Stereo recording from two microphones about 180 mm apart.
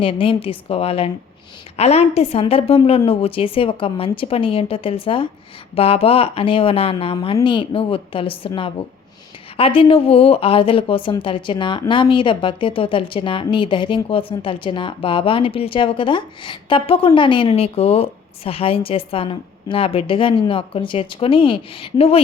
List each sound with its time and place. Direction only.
0.0 s a woman's voice: 30° left (ahead or behind)